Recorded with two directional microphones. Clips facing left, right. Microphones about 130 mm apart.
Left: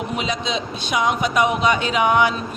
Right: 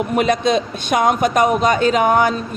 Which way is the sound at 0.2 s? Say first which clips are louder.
Right 12 dB; 55° right (ahead or behind).